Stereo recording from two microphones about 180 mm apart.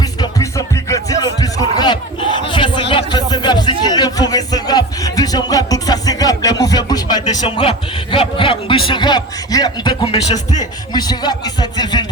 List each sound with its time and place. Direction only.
0.0 s music: 20° left (ahead or behind)
2.5 s a sound: 25° left (ahead or behind)
10.6 s speech: 20° left (ahead or behind)